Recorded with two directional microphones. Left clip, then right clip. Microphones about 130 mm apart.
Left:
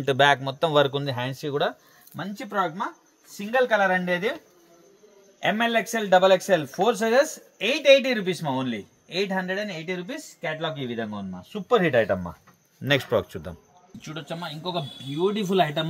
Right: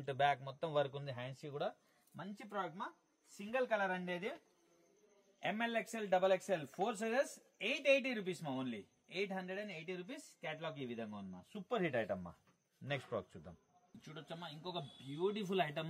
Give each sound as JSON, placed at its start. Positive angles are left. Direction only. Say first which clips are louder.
{"t": 0.0, "sound": "speech", "louder": "left 16 dB", "side_deg": 80}
{"t": 2.1, "sound": "speech", "louder": "left 17 dB", "side_deg": 40}
{"t": 5.4, "sound": "speech", "louder": "left 16 dB", "side_deg": 25}
{"t": 14.0, "sound": "speech", "louder": "left 16 dB", "side_deg": 20}